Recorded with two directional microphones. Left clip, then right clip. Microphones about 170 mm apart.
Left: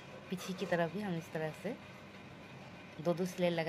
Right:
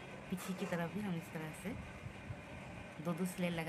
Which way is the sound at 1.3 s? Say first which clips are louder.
Left 12 dB; 40° left (ahead or behind).